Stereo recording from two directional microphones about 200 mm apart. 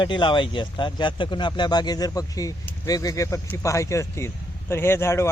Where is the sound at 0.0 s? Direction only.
25° left (ahead or behind).